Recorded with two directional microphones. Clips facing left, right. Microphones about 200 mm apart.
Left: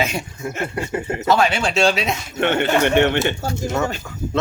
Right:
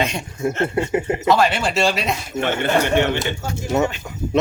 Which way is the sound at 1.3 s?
Centre (ahead or behind).